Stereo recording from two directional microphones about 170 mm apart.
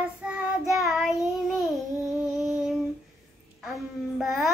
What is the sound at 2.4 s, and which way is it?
Female singing, centre (ahead or behind).